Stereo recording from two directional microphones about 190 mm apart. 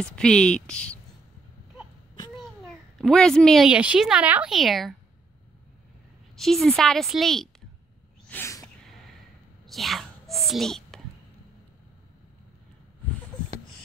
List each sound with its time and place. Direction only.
0.0 s speech: 5° left (ahead or behind)
3.0 s speech: 5° left (ahead or behind)
6.3 s speech: centre (ahead or behind)
8.3 s a sound: 15° left (ahead or behind)
9.7 s whispering: centre (ahead or behind)